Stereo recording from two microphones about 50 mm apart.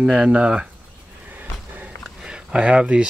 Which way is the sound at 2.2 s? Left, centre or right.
Centre.